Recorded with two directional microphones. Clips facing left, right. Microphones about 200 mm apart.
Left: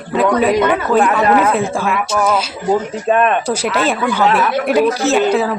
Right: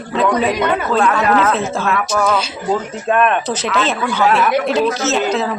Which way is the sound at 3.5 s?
10° left (ahead or behind).